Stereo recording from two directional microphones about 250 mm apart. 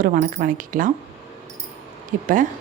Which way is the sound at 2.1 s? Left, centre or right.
Right.